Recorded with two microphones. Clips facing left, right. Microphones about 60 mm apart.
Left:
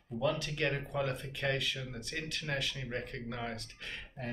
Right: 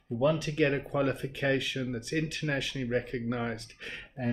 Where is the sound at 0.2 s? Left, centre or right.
Right.